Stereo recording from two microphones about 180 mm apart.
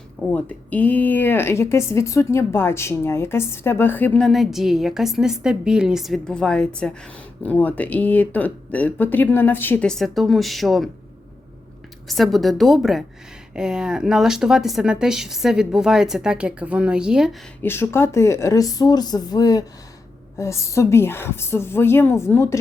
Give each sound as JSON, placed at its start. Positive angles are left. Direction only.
{"t": 0.3, "sound": "speech", "side_deg": 10}
{"t": 12.0, "sound": "speech", "side_deg": 0}
{"t": 17.6, "sound": "speech", "side_deg": 15}